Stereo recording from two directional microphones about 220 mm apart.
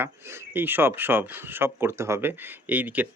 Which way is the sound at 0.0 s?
10° right (ahead or behind).